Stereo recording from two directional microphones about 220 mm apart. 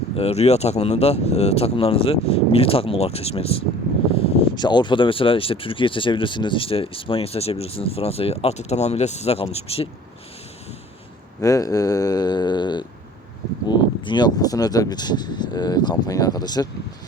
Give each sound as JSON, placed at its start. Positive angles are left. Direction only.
{"t": 0.2, "sound": "speech", "side_deg": 30}
{"t": 11.3, "sound": "speech", "side_deg": 15}